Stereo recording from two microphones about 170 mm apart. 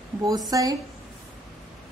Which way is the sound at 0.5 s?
20° right (ahead or behind).